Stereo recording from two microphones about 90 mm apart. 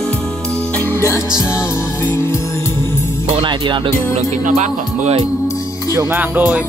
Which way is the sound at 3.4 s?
60° right (ahead or behind).